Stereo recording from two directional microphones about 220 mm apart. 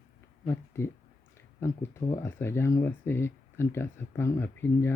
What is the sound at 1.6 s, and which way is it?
Speech, 10° left (ahead or behind).